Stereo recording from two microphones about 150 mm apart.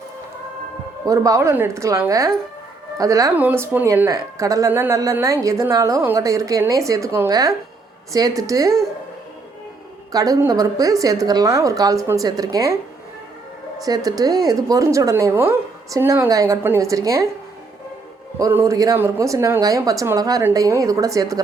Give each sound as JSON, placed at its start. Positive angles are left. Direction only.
{"t": 1.0, "sound": "speech", "side_deg": -20}
{"t": 10.1, "sound": "speech", "side_deg": -25}
{"t": 13.8, "sound": "speech", "side_deg": -25}
{"t": 18.3, "sound": "speech", "side_deg": -20}